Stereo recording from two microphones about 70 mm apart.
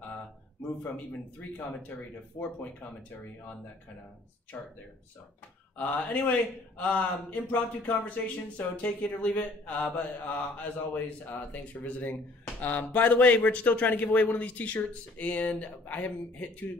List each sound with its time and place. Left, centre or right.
1.7 s speech: left
5.8 s speech: left